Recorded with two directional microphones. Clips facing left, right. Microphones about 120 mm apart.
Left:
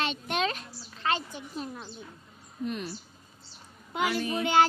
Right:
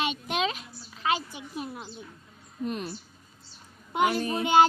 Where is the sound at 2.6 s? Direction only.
40° right (ahead or behind).